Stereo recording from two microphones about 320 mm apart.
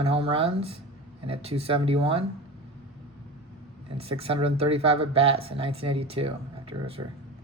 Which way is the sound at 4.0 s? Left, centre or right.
Centre.